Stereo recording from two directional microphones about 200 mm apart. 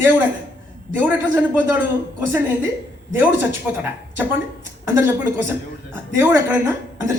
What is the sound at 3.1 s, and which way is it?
Speech, 10° right (ahead or behind).